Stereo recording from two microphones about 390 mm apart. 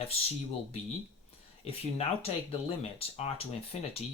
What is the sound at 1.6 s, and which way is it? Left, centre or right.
Speech, centre.